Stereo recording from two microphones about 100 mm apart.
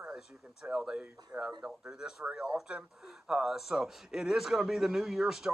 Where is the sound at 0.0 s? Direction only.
5° right (ahead or behind).